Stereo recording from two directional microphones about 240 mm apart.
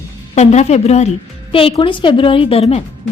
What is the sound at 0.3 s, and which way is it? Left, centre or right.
A woman's voice, left.